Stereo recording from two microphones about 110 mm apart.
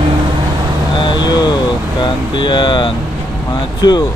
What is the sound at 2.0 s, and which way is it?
Speech, 45° left (ahead or behind).